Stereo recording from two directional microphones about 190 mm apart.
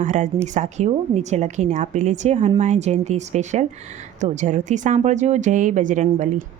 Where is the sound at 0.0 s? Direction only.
40° right (ahead or behind).